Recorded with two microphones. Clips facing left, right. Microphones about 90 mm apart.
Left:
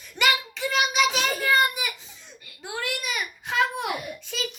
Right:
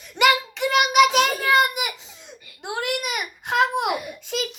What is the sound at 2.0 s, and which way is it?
Baby laughter, 75° right (ahead or behind).